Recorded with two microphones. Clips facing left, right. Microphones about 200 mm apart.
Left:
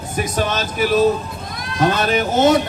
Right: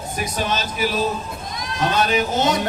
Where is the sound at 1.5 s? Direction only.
55° left (ahead or behind).